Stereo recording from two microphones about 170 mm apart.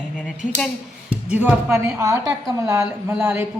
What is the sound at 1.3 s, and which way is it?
A woman's voice, 10° right (ahead or behind).